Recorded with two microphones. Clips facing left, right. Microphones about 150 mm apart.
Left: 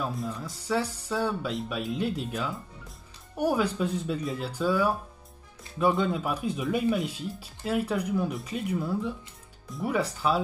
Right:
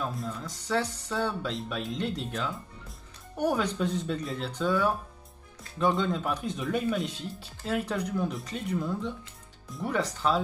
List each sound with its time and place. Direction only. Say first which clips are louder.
0.0 s speech: left 2 dB; 5° left (ahead or behind)